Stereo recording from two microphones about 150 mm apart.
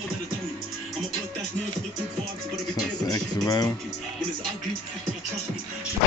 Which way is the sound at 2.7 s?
25° left (ahead or behind).